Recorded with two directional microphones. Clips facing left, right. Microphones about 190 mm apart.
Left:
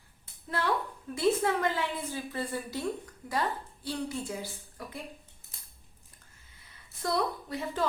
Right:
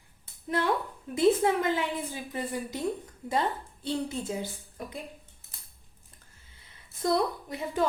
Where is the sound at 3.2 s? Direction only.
25° right (ahead or behind).